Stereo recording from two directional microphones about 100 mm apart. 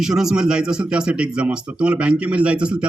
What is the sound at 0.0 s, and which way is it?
A man's voice, 5° right (ahead or behind).